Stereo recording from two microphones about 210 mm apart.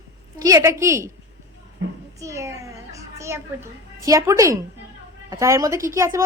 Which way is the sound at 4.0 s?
15° right (ahead or behind).